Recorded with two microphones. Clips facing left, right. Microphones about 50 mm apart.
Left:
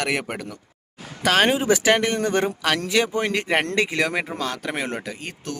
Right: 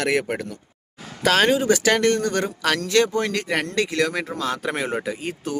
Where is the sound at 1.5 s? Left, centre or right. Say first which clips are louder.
Even; centre.